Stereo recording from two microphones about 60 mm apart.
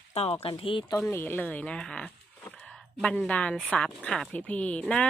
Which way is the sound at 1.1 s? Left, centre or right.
Left.